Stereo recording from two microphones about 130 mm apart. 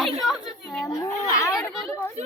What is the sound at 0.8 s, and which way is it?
Speech, 25° left (ahead or behind).